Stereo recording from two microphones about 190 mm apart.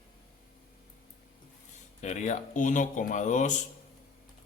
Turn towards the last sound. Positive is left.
turn(degrees=40)  # may be behind; listen again after turning